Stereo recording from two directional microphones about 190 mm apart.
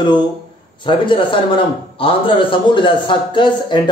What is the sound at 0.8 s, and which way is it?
A man's voice, 25° left (ahead or behind).